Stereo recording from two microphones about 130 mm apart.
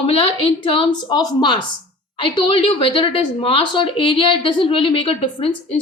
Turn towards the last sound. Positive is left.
turn(degrees=45)  # may be behind; listen again after turning